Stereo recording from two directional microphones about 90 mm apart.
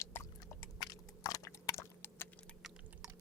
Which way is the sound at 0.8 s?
40° left (ahead or behind).